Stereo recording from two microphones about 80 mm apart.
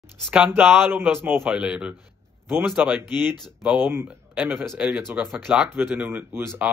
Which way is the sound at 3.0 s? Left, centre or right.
Right.